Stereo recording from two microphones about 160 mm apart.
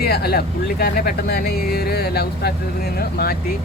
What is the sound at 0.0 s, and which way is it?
Speech, 75° left (ahead or behind).